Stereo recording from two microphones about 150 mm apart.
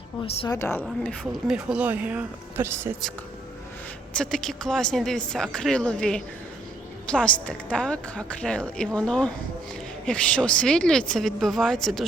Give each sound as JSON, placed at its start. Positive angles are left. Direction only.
{"t": 0.4, "sound": "speech", "side_deg": 20}
{"t": 0.9, "sound": "speech", "side_deg": 0}
{"t": 4.2, "sound": "speech", "side_deg": 5}